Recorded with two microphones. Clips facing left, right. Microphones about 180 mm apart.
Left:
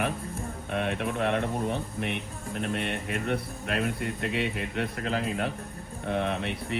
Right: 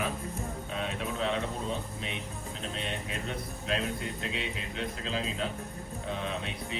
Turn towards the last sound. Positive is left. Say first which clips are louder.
# left 5 dB
turn(degrees=65)  # may be behind; listen again after turning